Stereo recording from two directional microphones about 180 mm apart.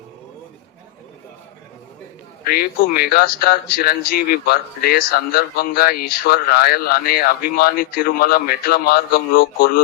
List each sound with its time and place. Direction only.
2.4 s a man's voice: 55° left (ahead or behind)